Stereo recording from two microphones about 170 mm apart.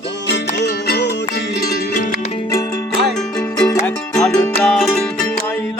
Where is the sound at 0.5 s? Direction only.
85° left.